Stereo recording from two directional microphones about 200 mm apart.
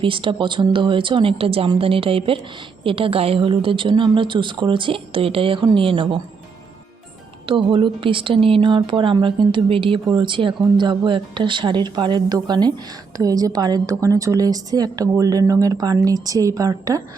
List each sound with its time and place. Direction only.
0.0 s a woman's voice: 25° right (ahead or behind)
7.4 s a woman's voice: 25° right (ahead or behind)